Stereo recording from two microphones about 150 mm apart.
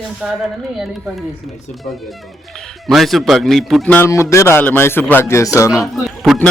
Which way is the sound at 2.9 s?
Centre (ahead or behind).